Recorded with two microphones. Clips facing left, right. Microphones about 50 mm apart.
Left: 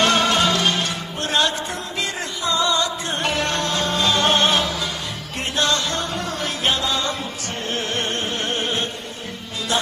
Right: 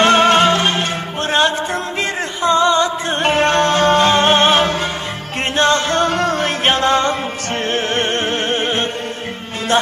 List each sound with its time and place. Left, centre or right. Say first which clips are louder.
0.0 s music: right 7 dB; right
6.0 s music: right 9 dB; right